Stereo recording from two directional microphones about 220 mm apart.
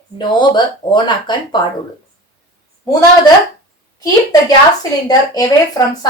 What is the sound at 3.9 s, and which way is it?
A woman's voice, 15° left (ahead or behind).